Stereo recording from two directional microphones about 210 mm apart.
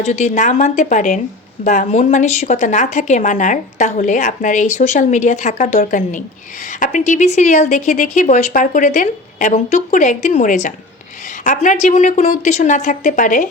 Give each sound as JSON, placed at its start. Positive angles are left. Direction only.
{"t": 0.0, "sound": "speech", "side_deg": 35}